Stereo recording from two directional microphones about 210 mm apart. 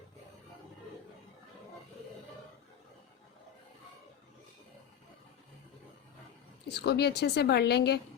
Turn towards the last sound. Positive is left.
turn(degrees=50)  # may be behind; listen again after turning